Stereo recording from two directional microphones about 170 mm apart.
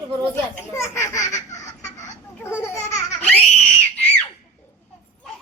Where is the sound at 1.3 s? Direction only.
45° left (ahead or behind).